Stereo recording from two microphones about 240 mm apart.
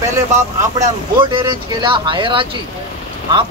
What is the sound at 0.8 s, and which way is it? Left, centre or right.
Speech, centre.